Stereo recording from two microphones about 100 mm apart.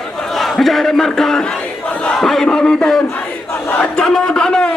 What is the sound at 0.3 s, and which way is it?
A man's voice, centre (ahead or behind).